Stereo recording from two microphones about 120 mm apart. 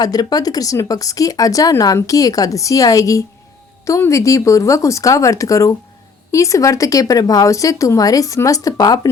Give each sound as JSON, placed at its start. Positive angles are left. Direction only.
{"t": 0.0, "sound": "speech", "side_deg": 35}